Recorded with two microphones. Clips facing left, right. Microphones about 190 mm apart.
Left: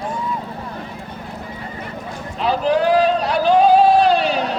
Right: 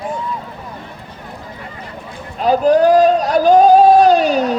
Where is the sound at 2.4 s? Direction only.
45° right (ahead or behind).